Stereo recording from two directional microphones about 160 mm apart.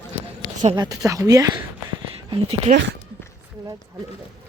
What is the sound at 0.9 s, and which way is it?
Speech, 20° right (ahead or behind).